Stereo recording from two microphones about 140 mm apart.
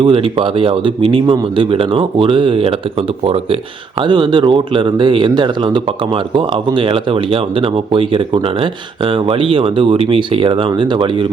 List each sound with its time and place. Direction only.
0.0 s speech: 40° right (ahead or behind)
4.0 s speech: 35° right (ahead or behind)